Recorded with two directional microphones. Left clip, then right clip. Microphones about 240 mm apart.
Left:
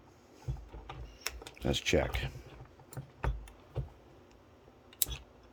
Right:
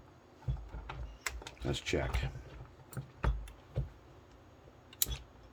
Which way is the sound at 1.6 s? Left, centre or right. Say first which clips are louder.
Left 5 dB; left.